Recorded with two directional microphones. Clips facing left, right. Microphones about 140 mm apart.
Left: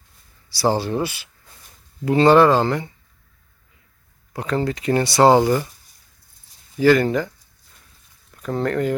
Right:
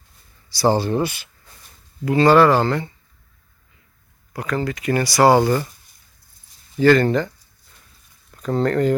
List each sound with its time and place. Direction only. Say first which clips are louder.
0.5 s speech: right 2 dB; 10° left (ahead or behind)
2.0 s speech: even; 25° left (ahead or behind)
4.3 s speech: left 1 dB; 30° left (ahead or behind)
6.7 s speech: right 1 dB; 10° left (ahead or behind)
8.6 s speech: right 3 dB; 5° left (ahead or behind)